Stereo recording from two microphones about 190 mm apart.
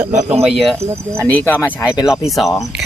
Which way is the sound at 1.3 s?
10° left (ahead or behind).